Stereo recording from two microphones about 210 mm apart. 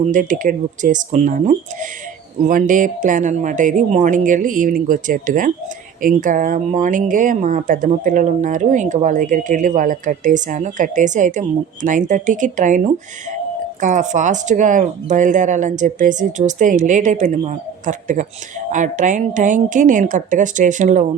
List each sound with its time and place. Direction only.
0.0 s speech: 40° right (ahead or behind)